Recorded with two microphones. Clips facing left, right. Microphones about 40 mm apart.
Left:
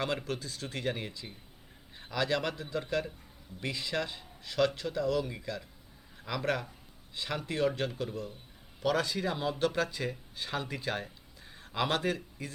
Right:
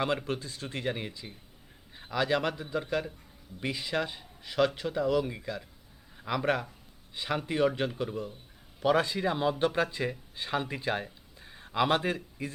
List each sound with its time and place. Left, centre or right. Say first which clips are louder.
0.0 s a man's voice: right 3 dB; centre